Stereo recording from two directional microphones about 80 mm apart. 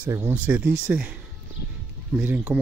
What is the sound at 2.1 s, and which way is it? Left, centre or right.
Speech, right.